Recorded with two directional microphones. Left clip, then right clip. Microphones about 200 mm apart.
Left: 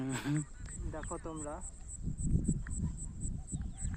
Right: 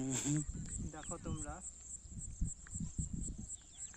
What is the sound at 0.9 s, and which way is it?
Speech, 40° right (ahead or behind).